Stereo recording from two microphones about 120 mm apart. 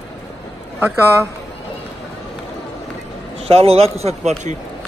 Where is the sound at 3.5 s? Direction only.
55° right (ahead or behind).